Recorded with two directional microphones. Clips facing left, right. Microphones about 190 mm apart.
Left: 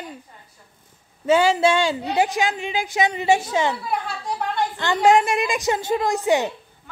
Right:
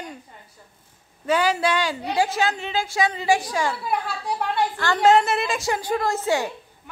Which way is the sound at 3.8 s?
Centre (ahead or behind).